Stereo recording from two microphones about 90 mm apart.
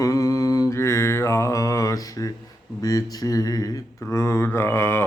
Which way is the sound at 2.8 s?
45° left (ahead or behind).